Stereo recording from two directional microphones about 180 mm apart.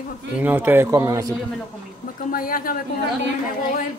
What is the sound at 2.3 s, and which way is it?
Speech, 50° left (ahead or behind).